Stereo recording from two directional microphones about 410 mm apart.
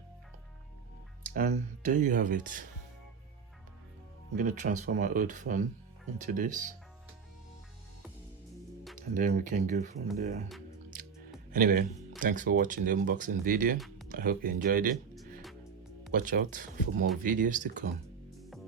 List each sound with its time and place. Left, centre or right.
1.2 s speech: right
4.4 s speech: centre
9.0 s speech: centre
11.5 s speech: centre
13.7 s music: centre
14.1 s speech: right
16.1 s speech: centre